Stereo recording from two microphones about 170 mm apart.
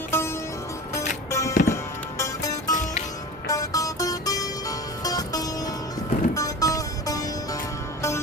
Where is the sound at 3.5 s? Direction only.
20° left (ahead or behind).